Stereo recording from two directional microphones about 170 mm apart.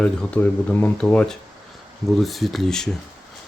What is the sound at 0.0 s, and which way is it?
Speech, 5° left (ahead or behind).